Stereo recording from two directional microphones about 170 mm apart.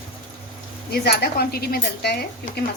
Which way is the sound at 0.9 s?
70° left (ahead or behind).